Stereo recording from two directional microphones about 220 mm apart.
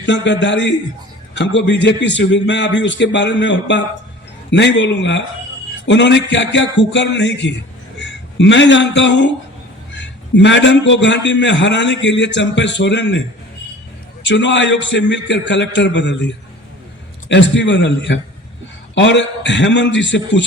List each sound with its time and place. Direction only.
0.0 s a man's voice: 55° left (ahead or behind)
14.3 s a man's voice: 55° left (ahead or behind)